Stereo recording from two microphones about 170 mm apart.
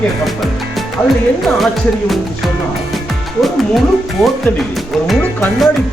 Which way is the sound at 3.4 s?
Centre (ahead or behind).